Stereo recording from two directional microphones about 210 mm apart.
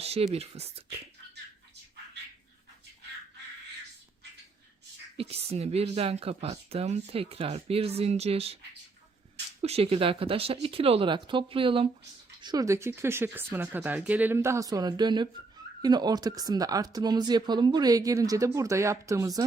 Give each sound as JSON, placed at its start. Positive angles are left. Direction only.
{"t": 0.0, "sound": "a sound", "side_deg": -30}
{"t": 0.3, "sound": "speech", "side_deg": -30}
{"t": 5.1, "sound": "speech", "side_deg": -30}
{"t": 9.6, "sound": "speech", "side_deg": -30}